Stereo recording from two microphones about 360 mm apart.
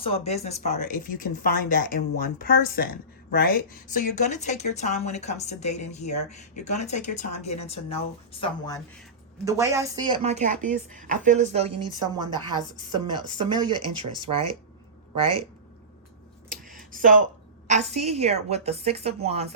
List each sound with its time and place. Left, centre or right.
0.0 s speech: centre
9.4 s speech: centre
16.5 s a sound: right
17.7 s speech: centre